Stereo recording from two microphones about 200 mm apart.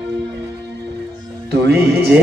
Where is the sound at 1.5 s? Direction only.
55° right (ahead or behind).